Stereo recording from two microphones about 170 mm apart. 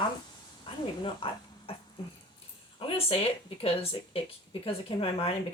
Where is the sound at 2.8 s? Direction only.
35° left (ahead or behind).